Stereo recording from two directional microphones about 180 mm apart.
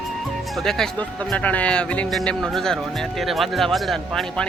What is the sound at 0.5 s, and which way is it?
Speech, centre (ahead or behind).